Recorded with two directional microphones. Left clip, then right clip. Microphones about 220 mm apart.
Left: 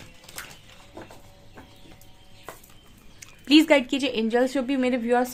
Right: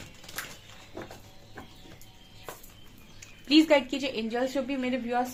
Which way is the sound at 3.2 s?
50° left (ahead or behind).